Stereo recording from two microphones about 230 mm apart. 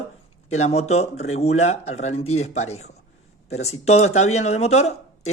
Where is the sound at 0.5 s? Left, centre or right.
Left.